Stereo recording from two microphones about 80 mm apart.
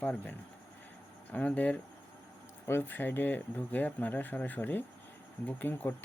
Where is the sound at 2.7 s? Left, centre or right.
Left.